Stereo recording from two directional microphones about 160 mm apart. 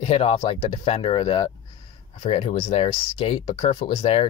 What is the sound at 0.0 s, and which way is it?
Speech, 40° left (ahead or behind).